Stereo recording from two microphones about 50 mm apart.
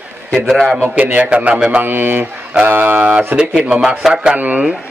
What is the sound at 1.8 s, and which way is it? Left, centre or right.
A man's voice, right.